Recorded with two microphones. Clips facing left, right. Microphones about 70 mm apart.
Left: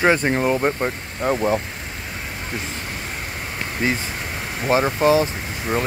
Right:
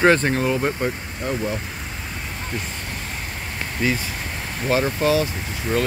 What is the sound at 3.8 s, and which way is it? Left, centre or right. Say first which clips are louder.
Speech: even; left.